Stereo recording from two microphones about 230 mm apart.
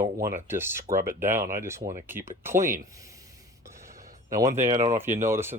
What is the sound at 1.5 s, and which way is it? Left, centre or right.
Speech, centre.